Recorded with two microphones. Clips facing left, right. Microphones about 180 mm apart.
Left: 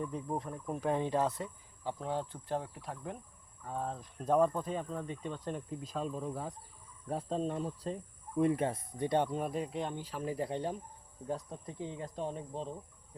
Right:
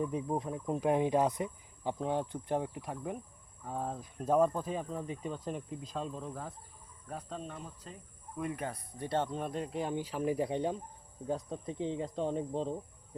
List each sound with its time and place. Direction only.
0.0 s speech: 10° right (ahead or behind); by 6.5 s 10° left (ahead or behind)
7.1 s speech: 30° left (ahead or behind); by 12.7 s 30° right (ahead or behind)